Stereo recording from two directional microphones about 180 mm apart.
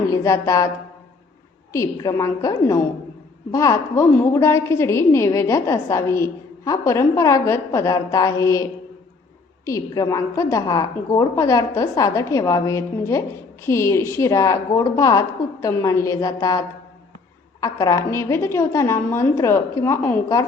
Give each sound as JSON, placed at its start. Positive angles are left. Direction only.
{"t": 0.1, "sound": "a woman's voice", "side_deg": 15}
{"t": 1.7, "sound": "a woman's voice", "side_deg": 15}